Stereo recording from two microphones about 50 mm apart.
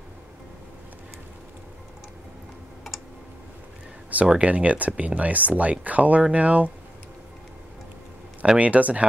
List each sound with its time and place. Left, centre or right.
4.1 s speech: right
8.4 s speech: right